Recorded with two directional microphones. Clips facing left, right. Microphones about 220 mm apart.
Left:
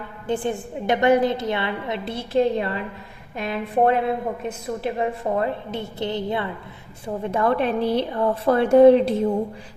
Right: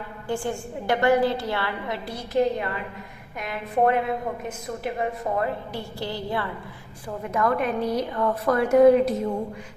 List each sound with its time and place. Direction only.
0.3 s a woman's voice: 20° left (ahead or behind)